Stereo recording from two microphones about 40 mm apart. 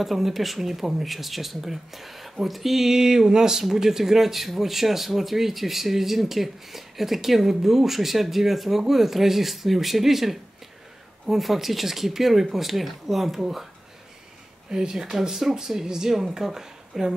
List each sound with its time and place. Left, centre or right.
0.0 s speech: centre
14.7 s speech: centre